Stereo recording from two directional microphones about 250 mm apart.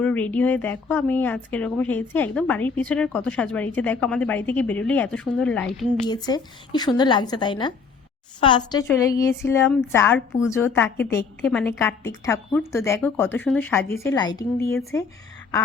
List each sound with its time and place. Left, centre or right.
0.0 s speech: centre
6.1 s speech: centre